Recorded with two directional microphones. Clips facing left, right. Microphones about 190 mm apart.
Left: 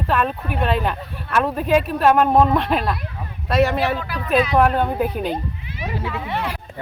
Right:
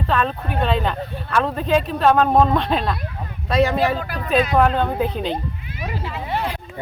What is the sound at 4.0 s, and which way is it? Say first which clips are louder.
Speech: even; 45° right (ahead or behind).